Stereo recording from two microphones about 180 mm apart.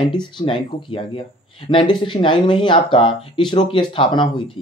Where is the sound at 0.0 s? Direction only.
25° left (ahead or behind).